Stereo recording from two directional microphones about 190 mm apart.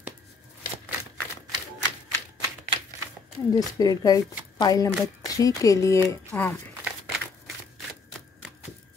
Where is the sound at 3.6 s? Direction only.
20° left (ahead or behind).